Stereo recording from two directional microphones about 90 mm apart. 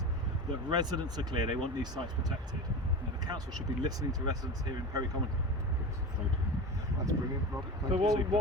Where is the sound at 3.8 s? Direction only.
45° right (ahead or behind).